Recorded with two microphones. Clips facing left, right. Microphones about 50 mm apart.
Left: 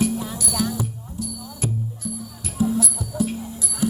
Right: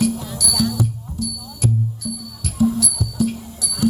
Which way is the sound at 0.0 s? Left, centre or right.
Left.